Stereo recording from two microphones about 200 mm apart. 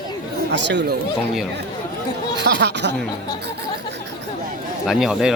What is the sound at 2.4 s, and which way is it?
Speech, 60° right (ahead or behind).